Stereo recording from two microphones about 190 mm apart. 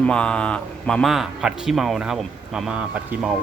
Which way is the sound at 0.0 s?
5° left (ahead or behind).